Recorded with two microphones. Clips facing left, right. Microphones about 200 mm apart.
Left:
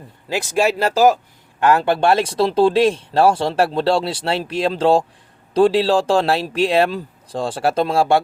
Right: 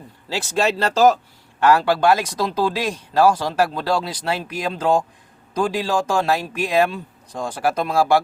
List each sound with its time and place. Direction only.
0.3 s speech: 15° left (ahead or behind)